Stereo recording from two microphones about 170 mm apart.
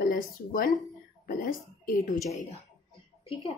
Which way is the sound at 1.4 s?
55° left (ahead or behind).